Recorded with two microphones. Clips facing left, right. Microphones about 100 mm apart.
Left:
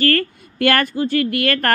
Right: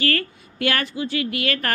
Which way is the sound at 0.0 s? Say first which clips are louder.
Left 6 dB; 50° left (ahead or behind).